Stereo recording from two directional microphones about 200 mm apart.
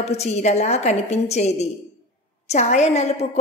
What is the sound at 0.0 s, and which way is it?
A woman's voice, 35° left (ahead or behind).